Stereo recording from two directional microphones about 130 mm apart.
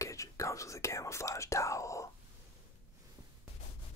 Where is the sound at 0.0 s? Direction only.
25° left (ahead or behind).